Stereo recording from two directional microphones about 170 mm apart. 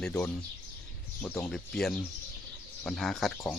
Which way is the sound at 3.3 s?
15° left (ahead or behind).